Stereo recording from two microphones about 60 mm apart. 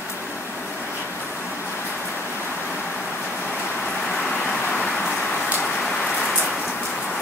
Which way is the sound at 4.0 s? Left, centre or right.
Centre.